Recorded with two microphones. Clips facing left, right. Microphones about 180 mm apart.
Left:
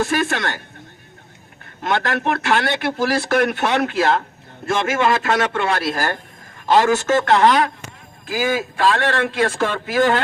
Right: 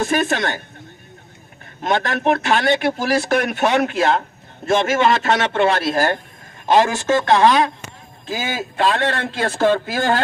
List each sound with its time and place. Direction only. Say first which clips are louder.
0.0 s a man's voice: right 1 dB; 20° right (ahead or behind)
1.8 s a man's voice: right 1 dB; 20° right (ahead or behind)